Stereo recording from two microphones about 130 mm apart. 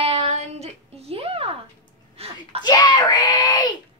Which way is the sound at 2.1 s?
50° right (ahead or behind).